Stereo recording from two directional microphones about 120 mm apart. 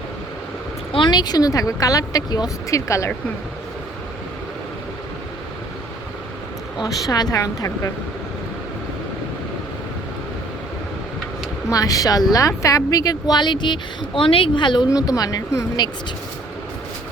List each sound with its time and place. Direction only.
0.9 s speech: 40° left (ahead or behind)
6.8 s a woman's voice: 30° left (ahead or behind)
11.7 s speech: 30° left (ahead or behind)